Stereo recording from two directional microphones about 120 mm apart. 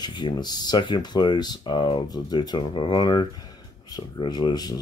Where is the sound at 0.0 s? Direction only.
35° left (ahead or behind).